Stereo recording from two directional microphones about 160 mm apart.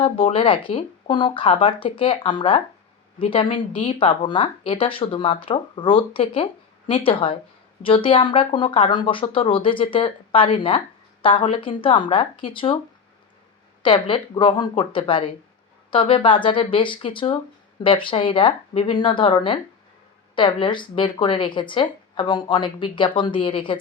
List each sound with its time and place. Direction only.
0.0 s speech: 35° left (ahead or behind)
13.8 s speech: 30° left (ahead or behind)